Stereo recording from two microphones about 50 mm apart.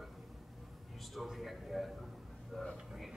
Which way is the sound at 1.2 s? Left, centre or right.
Centre.